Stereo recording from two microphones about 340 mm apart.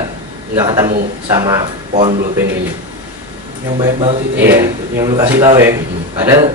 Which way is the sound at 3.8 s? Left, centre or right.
Centre.